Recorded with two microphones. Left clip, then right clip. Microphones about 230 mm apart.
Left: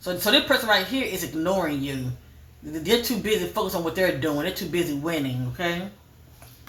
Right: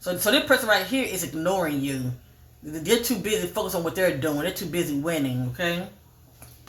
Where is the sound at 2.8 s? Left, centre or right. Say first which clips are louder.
Even; right.